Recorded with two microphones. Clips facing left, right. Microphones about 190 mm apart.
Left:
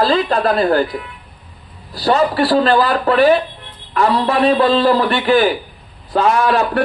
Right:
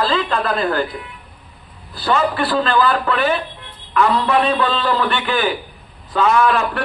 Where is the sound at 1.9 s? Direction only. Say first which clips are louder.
Left 4 dB; 40° left (ahead or behind).